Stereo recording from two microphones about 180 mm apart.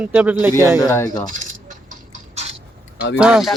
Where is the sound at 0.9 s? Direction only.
15° left (ahead or behind).